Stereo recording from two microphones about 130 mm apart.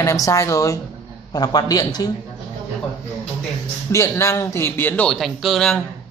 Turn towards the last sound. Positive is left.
turn(degrees=0)  # may be behind; listen again after turning